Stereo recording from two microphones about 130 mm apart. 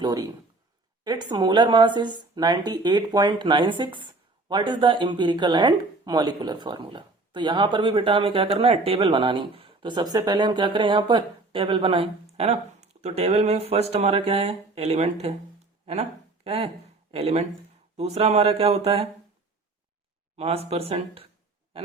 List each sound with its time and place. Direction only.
0.0 s speech: 30° right (ahead or behind); by 19.0 s 50° right (ahead or behind)
20.3 s speech: 50° right (ahead or behind)